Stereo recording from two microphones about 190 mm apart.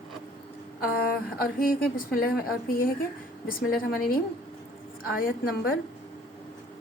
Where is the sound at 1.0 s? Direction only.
50° left (ahead or behind).